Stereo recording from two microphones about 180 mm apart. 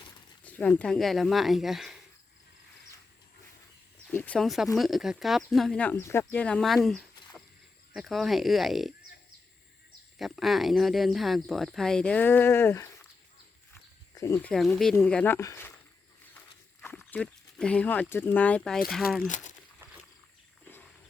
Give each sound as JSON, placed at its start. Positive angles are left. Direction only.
{"t": 0.4, "sound": "speech", "side_deg": 5}
{"t": 4.0, "sound": "speech", "side_deg": 10}
{"t": 6.8, "sound": "a sound", "side_deg": 0}
{"t": 7.9, "sound": "speech", "side_deg": 0}
{"t": 10.2, "sound": "speech", "side_deg": 0}
{"t": 14.2, "sound": "speech", "side_deg": 15}
{"t": 17.1, "sound": "speech", "side_deg": 5}
{"t": 19.3, "sound": "speech", "side_deg": 45}